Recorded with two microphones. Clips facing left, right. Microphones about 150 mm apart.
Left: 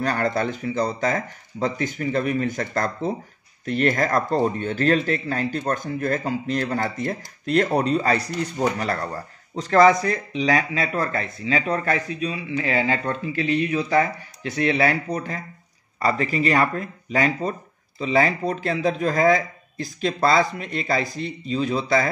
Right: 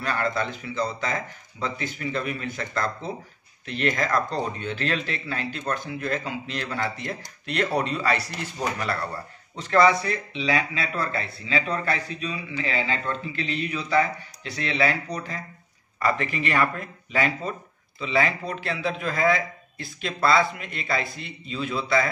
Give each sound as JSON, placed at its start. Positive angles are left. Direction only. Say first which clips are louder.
{"t": 0.0, "sound": "speech", "louder": "left 4 dB", "side_deg": 45}
{"t": 16.0, "sound": "speech", "louder": "left 4 dB", "side_deg": 35}